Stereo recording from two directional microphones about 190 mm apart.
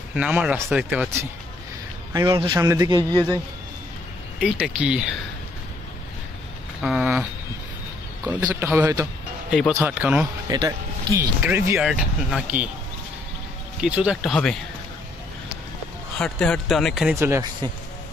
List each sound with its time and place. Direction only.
0.1 s speech: 5° right (ahead or behind)
2.1 s a man's voice: 20° right (ahead or behind)
4.4 s speech: 5° right (ahead or behind)
6.8 s speech: 5° right (ahead or behind)
8.3 s speech: 10° right (ahead or behind)
10.5 s speech: 20° right (ahead or behind); by 12.6 s 5° right (ahead or behind)
13.7 s speech: 5° right (ahead or behind)
16.2 s speech: 5° left (ahead or behind)
17.2 s speech: 20° right (ahead or behind)